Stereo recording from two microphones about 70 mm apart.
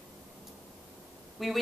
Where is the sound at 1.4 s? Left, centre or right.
Centre.